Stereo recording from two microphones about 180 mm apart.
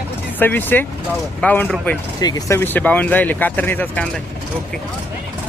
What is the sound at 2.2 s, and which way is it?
Speech, 20° left (ahead or behind).